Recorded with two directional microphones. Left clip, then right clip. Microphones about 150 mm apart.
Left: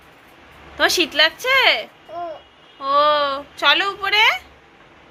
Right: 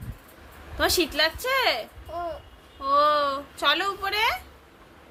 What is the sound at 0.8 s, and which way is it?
A woman's voice, 10° right (ahead or behind).